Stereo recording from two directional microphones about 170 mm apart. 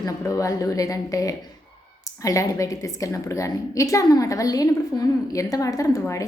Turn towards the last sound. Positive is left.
turn(degrees=20)  # may be behind; listen again after turning